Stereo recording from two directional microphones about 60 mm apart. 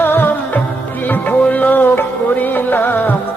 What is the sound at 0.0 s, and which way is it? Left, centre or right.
Music, left.